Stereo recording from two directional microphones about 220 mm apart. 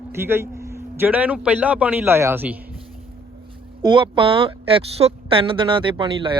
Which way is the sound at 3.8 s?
20° right (ahead or behind).